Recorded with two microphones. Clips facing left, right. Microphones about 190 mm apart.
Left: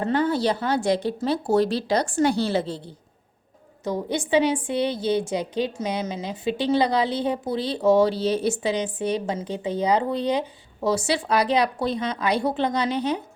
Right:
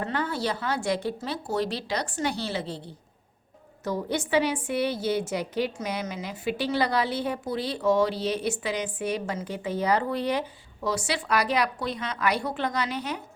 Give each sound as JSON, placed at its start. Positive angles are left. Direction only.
{"t": 0.0, "sound": "a woman's voice", "side_deg": 30}
{"t": 3.8, "sound": "a woman's voice", "side_deg": 15}
{"t": 4.5, "sound": "a woman's voice", "side_deg": 30}
{"t": 4.8, "sound": "a woman's voice", "side_deg": 20}